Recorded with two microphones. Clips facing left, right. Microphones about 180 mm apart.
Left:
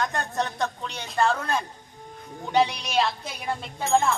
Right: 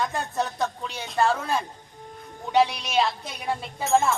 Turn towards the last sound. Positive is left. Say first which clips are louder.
# right 1 dB
turn(degrees=-5)  # may be behind; listen again after turning